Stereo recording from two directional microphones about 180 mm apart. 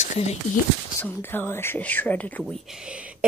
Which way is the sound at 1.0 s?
10° left (ahead or behind).